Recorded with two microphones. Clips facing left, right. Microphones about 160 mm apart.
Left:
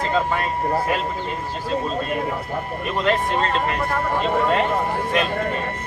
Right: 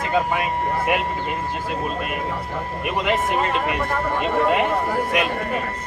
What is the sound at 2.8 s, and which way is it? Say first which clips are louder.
A man's voice: even; 15° right (ahead or behind).